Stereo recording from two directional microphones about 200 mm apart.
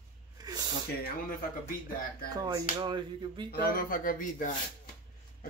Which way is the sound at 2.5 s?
20° right (ahead or behind).